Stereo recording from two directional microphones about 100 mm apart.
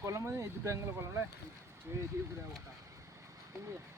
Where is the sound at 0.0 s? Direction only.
30° right (ahead or behind).